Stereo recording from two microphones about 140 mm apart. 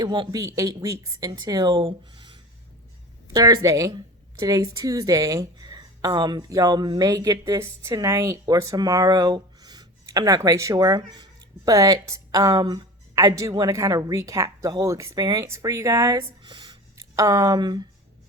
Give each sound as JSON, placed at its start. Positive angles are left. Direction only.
{"t": 0.0, "sound": "a woman's voice", "side_deg": -30}